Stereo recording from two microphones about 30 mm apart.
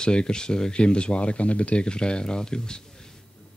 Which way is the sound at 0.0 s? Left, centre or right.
Left.